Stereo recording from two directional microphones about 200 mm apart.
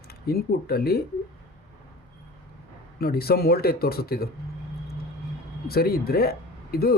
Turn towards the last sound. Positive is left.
turn(degrees=50)  # may be behind; listen again after turning